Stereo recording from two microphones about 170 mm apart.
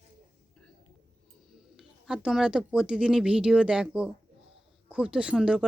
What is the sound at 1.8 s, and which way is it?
Speech, 5° right (ahead or behind).